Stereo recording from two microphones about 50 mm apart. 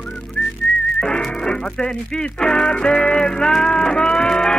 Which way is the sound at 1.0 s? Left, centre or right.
Centre.